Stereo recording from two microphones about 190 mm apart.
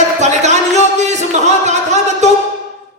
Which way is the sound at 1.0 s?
35° right (ahead or behind).